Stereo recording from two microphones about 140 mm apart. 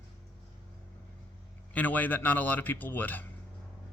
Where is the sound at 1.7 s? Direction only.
10° left (ahead or behind).